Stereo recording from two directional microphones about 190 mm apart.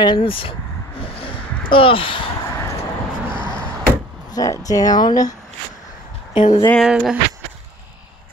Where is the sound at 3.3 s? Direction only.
25° left (ahead or behind).